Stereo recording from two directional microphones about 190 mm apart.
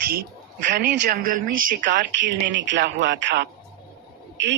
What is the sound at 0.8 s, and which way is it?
Speech, 50° right (ahead or behind).